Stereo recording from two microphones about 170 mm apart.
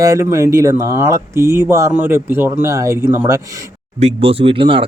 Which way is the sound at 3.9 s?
35° right (ahead or behind).